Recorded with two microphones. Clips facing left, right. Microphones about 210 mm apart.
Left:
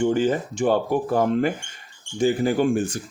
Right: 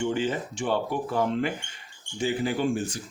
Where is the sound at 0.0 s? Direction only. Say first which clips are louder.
Left 6 dB; 45° left (ahead or behind).